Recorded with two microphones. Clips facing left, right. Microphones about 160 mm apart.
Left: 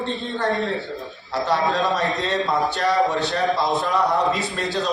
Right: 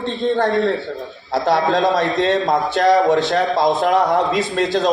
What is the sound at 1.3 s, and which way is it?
A man's voice, 90° right.